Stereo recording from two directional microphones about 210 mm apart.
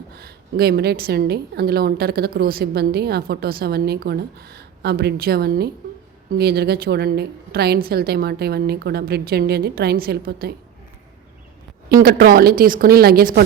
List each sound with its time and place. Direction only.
0.2 s a woman's voice: 50° right (ahead or behind)
11.9 s a woman's voice: 45° right (ahead or behind)